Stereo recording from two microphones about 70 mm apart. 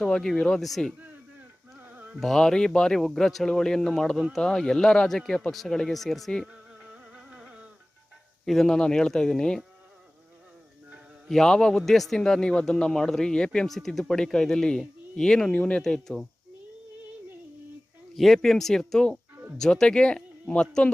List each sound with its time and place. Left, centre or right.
0.0 s a man's voice: centre
1.8 s music: right
2.2 s a man's voice: centre
6.4 s music: centre
8.4 s a man's voice: centre
11.3 s a man's voice: centre
15.8 s speech: centre
18.1 s a man's voice: centre